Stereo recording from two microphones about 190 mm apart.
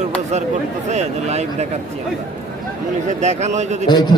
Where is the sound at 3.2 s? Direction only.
35° right (ahead or behind).